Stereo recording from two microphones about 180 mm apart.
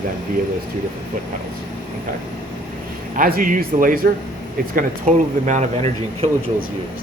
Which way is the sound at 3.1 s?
50° right (ahead or behind).